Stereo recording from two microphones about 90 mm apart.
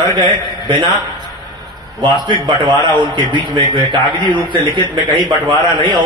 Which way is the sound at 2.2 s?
55° right (ahead or behind).